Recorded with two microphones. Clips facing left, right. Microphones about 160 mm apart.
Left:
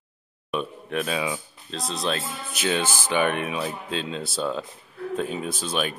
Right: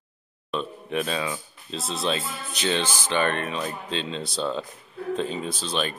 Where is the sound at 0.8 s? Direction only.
5° left (ahead or behind).